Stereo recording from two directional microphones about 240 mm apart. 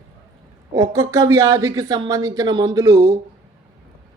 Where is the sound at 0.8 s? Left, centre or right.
Centre.